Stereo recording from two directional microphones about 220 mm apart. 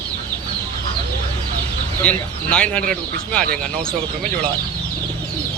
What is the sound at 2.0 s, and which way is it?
Speech, 5° left (ahead or behind).